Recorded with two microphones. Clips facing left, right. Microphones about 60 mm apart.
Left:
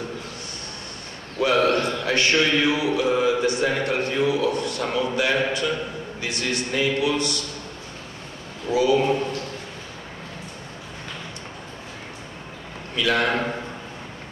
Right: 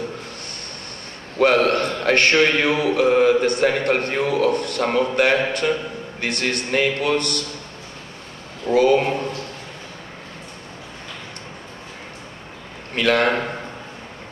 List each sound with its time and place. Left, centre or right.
1.4 s speech: right
8.7 s speech: right
12.9 s a man's voice: right